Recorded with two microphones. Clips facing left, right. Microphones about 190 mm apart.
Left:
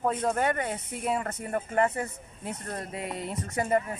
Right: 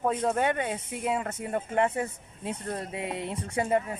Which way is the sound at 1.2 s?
10° right (ahead or behind).